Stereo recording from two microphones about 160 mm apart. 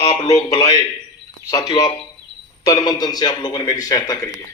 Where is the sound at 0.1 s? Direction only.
25° left (ahead or behind).